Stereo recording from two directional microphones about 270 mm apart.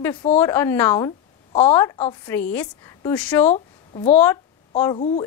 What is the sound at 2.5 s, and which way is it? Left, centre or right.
A woman's voice, centre.